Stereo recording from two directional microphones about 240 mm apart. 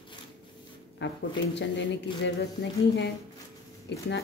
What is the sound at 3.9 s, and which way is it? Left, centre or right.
Speech, left.